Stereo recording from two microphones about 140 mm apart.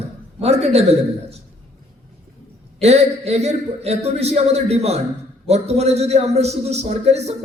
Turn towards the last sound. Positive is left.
turn(degrees=-50)  # may be behind; listen again after turning